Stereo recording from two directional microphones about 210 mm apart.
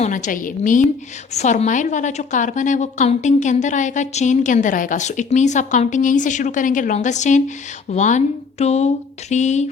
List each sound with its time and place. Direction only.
0.0 s a woman's voice: 35° left (ahead or behind)